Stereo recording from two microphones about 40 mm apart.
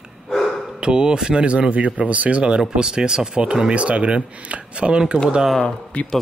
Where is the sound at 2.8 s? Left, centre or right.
Centre.